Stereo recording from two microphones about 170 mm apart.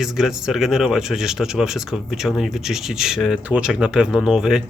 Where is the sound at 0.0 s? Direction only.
5° right (ahead or behind).